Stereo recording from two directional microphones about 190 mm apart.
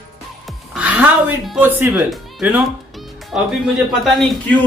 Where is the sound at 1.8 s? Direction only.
5° right (ahead or behind).